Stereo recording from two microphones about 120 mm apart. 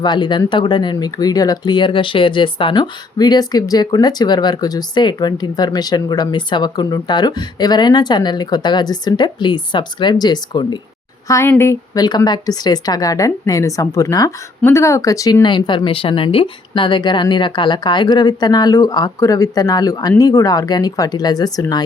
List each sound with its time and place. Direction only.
0.0 s speech: 40° left (ahead or behind)
11.3 s speech: 20° left (ahead or behind)
11.9 s speech: 35° left (ahead or behind)